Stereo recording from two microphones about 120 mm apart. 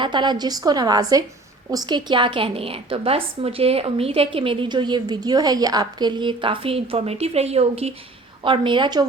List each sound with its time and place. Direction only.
0.0 s a woman's voice: 40° right (ahead or behind); by 7.9 s 60° right (ahead or behind)
8.4 s a woman's voice: 45° right (ahead or behind)